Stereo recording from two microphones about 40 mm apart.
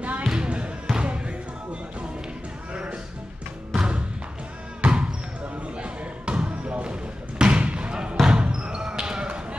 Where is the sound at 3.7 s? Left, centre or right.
Right.